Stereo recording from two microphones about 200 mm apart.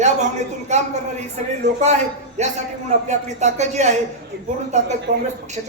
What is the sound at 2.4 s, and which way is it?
A man's voice, 35° right (ahead or behind).